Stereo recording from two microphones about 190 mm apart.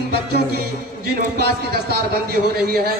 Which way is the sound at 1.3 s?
55° right (ahead or behind).